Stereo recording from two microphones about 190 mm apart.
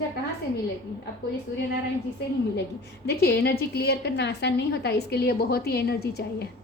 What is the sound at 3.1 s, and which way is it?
A woman's voice, 55° left (ahead or behind).